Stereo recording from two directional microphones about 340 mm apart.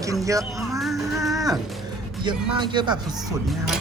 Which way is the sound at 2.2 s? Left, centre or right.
Centre.